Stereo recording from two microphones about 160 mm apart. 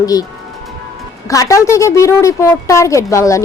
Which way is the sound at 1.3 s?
20° left (ahead or behind).